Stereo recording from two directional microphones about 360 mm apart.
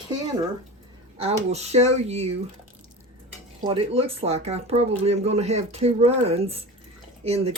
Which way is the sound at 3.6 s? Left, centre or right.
Centre.